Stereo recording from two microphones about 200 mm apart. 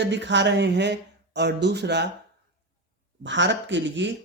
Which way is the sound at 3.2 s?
65° right (ahead or behind).